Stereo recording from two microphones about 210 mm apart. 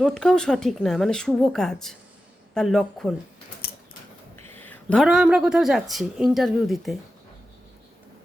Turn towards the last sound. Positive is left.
turn(degrees=0)  # may be behind; listen again after turning